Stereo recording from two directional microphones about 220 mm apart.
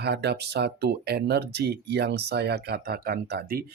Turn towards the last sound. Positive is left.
turn(degrees=-45)  # may be behind; listen again after turning